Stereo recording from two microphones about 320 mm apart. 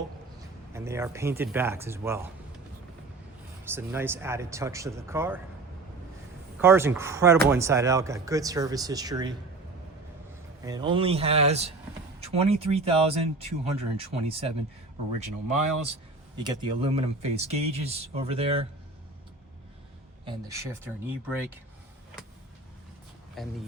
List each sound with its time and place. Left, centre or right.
0.7 s speech: centre
3.7 s speech: centre
6.6 s speech: centre
10.7 s speech: centre
16.4 s speech: centre
20.2 s speech: centre
23.4 s speech: centre